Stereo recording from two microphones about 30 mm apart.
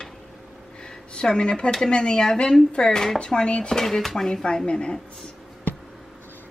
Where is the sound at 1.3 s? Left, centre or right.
Left.